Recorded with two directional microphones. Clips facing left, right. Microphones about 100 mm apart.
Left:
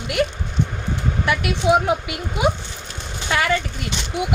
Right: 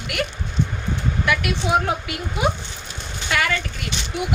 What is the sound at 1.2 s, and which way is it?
Speech, 30° left (ahead or behind).